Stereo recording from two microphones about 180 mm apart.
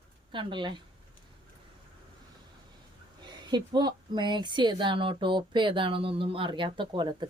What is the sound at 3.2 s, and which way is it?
Speech, 25° right (ahead or behind).